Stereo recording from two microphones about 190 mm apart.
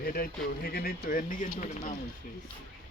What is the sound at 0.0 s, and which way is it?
Speech, 50° left (ahead or behind).